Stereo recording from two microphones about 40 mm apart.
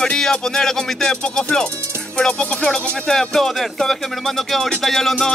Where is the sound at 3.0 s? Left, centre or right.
Centre.